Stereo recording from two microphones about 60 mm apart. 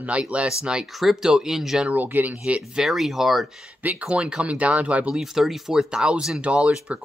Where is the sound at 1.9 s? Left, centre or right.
Right.